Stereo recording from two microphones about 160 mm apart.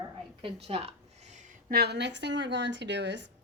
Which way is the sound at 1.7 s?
85° right.